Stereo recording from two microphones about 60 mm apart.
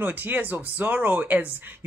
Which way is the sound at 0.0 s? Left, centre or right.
Right.